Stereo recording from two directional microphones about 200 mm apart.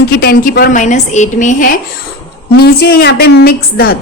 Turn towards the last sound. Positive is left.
turn(degrees=50)  # may be behind; listen again after turning